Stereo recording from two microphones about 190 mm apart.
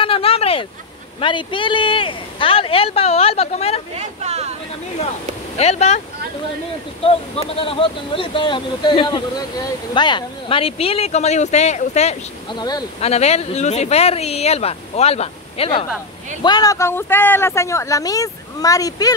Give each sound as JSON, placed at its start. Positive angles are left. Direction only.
{"t": 0.0, "sound": "vehicle", "side_deg": 30}
{"t": 1.2, "sound": "a man's voice", "side_deg": 25}
{"t": 3.9, "sound": "speech", "side_deg": -35}
{"t": 5.6, "sound": "speech", "side_deg": 35}
{"t": 7.0, "sound": "a man's voice", "side_deg": 30}
{"t": 12.5, "sound": "a man's voice", "side_deg": 20}
{"t": 13.0, "sound": "speech", "side_deg": 35}
{"t": 16.4, "sound": "speech", "side_deg": 20}